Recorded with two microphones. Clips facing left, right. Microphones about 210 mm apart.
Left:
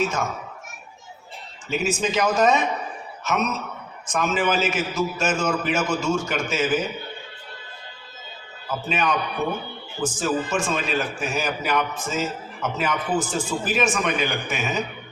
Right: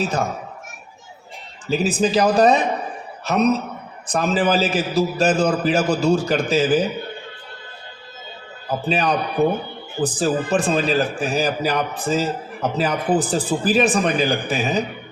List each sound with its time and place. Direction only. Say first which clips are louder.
0.0 s a man's voice: right 2 dB; 35° right (ahead or behind)
1.6 s a man's voice: right 5 dB; 35° right (ahead or behind)
8.6 s a man's voice: right 4 dB; 35° right (ahead or behind)